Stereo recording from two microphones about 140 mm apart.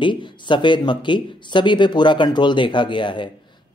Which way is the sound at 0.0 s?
35° left (ahead or behind).